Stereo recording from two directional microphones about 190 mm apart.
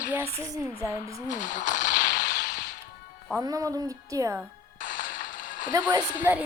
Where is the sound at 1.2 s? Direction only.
45° left (ahead or behind).